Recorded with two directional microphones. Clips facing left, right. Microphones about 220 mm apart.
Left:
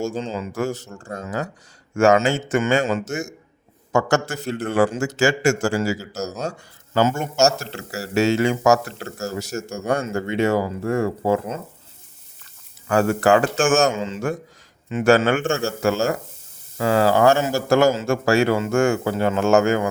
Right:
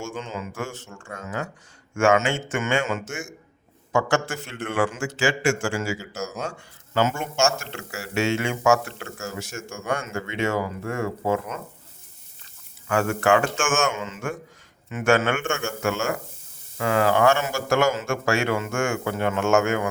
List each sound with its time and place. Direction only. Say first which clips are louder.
0.0 s speech: left 6 dB; 35° left (ahead or behind)
12.9 s speech: left 4 dB; 35° left (ahead or behind)